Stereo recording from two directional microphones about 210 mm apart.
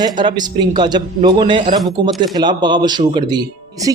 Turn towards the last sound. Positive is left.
turn(degrees=-20)  # may be behind; listen again after turning